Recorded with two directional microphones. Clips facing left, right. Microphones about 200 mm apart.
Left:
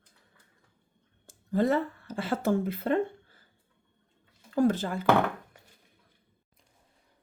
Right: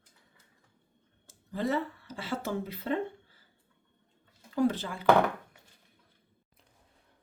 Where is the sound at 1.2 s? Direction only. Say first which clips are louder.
Left 6 dB; 50° left (ahead or behind).